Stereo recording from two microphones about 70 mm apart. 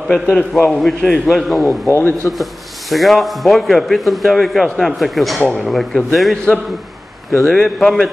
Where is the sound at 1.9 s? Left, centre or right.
Left.